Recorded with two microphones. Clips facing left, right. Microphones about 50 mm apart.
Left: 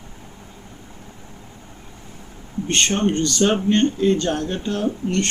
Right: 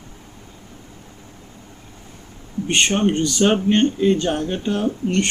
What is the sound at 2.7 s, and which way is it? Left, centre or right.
Speech, centre.